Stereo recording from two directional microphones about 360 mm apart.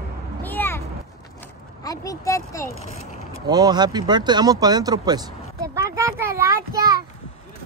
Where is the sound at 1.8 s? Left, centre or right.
Centre.